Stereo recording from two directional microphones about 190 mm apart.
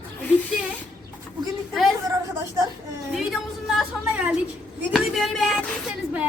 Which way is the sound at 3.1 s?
Centre (ahead or behind).